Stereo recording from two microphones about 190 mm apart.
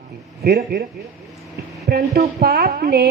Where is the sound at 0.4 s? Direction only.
55° right (ahead or behind).